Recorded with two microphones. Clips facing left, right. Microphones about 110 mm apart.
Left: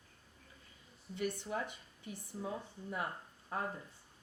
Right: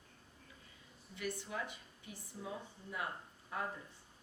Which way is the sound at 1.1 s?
40° left (ahead or behind).